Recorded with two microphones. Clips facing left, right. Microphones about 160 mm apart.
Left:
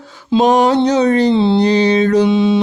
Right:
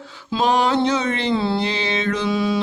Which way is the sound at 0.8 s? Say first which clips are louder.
Left 9 dB; 40° left (ahead or behind).